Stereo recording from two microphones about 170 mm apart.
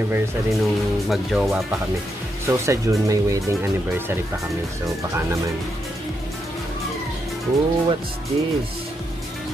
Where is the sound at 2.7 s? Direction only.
20° right (ahead or behind).